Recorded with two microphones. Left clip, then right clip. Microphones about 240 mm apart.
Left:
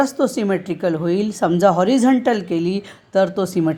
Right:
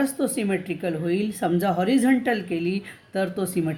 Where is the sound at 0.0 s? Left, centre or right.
Left.